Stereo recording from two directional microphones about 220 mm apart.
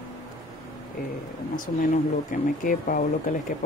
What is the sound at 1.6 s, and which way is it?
Speech, 35° left (ahead or behind).